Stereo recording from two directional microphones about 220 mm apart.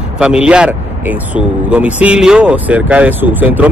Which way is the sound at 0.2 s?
5° right (ahead or behind).